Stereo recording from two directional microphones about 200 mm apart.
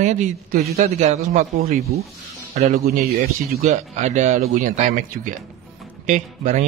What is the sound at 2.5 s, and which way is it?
A man's voice, 30° right (ahead or behind).